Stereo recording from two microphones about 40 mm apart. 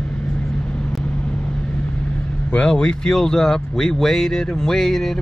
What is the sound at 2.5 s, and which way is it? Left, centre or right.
Speech, left.